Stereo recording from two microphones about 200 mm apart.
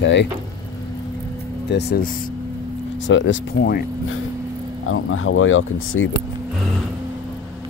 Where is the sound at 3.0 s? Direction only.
65° left (ahead or behind); by 3.8 s 50° left (ahead or behind).